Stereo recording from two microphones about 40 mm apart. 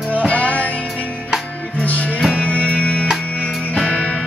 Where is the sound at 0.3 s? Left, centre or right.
Left.